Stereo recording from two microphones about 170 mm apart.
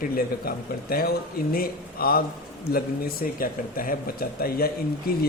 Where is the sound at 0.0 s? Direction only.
60° left (ahead or behind).